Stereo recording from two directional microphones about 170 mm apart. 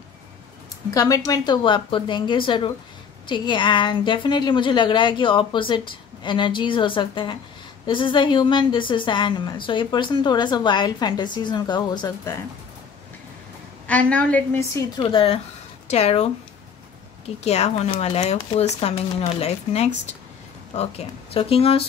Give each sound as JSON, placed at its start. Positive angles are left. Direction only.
{"t": 0.8, "sound": "a woman's voice", "side_deg": 20}
{"t": 13.8, "sound": "a woman's voice", "side_deg": 10}
{"t": 15.0, "sound": "speech", "side_deg": 30}
{"t": 17.5, "sound": "speech", "side_deg": 40}